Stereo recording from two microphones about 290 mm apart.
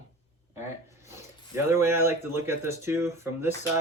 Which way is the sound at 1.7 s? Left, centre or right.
Centre.